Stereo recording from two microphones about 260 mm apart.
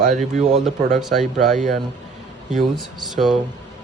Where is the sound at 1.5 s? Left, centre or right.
Right.